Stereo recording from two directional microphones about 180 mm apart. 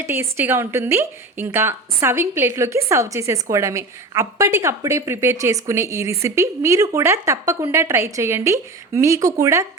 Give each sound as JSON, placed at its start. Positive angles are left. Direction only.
{"t": 0.0, "sound": "a woman's voice", "side_deg": -15}